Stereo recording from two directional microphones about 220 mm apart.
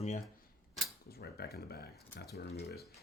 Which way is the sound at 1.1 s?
45° left (ahead or behind).